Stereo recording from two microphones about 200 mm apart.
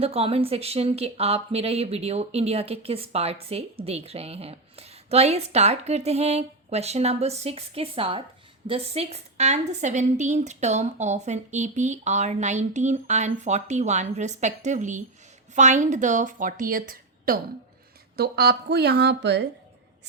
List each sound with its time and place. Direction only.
0.0 s a woman's voice: 30° right (ahead or behind); by 19.5 s 60° right (ahead or behind)